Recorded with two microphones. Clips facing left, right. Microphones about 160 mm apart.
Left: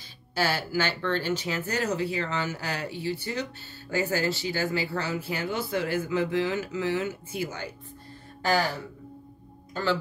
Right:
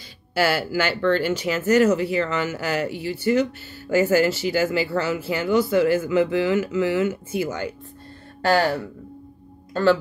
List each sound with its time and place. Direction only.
0.5 s speech: 90° right
8.5 s speech: 65° right (ahead or behind)